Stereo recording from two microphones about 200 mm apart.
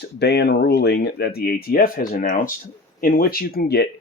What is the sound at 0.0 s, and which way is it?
Speech, 55° left (ahead or behind).